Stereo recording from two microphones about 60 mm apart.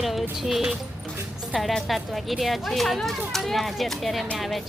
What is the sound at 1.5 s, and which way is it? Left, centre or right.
Speech, centre.